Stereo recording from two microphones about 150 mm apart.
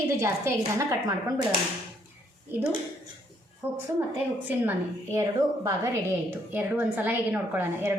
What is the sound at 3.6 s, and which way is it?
A woman's voice, 15° right (ahead or behind).